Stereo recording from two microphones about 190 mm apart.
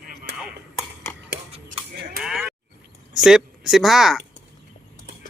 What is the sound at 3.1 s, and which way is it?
Speech, centre (ahead or behind).